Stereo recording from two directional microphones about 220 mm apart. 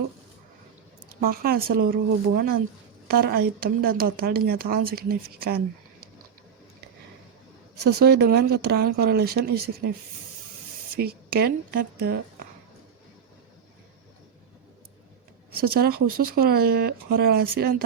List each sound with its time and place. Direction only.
1.2 s a woman's voice: 40° right (ahead or behind)
7.9 s a woman's voice: 50° right (ahead or behind)
10.9 s a woman's voice: 45° right (ahead or behind)
15.5 s a woman's voice: 45° right (ahead or behind)